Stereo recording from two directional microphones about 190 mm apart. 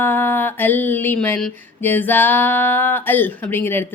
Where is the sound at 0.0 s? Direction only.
10° left (ahead or behind).